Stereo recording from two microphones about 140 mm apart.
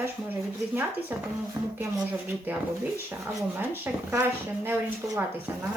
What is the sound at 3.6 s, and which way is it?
Speech, 15° right (ahead or behind).